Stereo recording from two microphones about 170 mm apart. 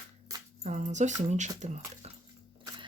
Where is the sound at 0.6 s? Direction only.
45° right (ahead or behind).